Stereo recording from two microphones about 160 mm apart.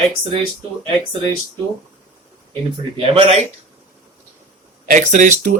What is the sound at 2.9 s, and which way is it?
Speech, 40° right (ahead or behind).